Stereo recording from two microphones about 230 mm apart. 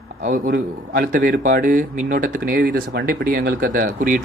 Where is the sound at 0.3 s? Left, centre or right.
Right.